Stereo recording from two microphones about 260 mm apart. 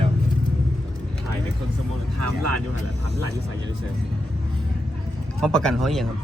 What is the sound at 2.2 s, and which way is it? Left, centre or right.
Speech, right.